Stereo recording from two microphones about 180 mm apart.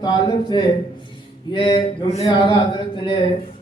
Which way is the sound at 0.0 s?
25° left (ahead or behind).